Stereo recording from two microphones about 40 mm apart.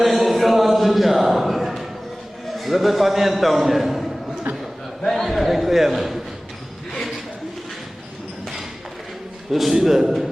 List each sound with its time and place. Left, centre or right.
0.0 s a sound: centre
2.6 s a man's voice: centre
4.5 s a man's voice: right
5.0 s a man's voice: centre
9.5 s a man's voice: centre